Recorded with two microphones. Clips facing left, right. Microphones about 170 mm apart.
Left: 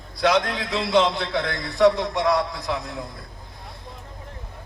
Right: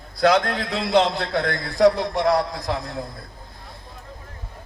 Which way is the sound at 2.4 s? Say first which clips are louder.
Right 1 dB; 35° right (ahead or behind).